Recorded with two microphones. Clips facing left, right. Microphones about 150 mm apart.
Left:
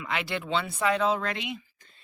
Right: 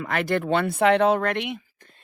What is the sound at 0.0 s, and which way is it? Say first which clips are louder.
Speech: right 7 dB; 50° right (ahead or behind).